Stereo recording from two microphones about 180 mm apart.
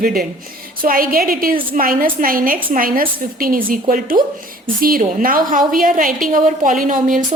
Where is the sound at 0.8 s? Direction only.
50° right (ahead or behind).